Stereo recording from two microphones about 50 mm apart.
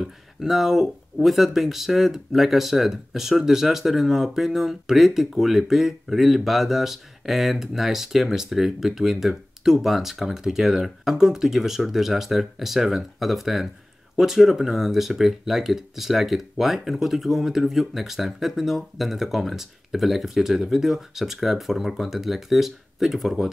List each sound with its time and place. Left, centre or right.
0.0 s speech: centre